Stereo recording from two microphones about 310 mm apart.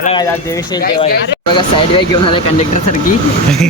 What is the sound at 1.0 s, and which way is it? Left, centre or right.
Speech, left.